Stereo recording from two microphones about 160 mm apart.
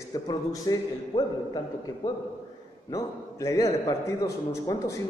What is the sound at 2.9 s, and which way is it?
A man's voice, 20° left (ahead or behind).